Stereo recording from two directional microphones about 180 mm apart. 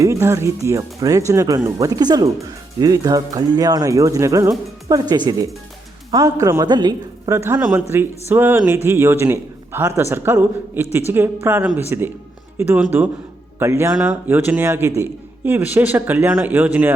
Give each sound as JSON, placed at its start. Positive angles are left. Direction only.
{"t": 0.0, "sound": "speech", "side_deg": -15}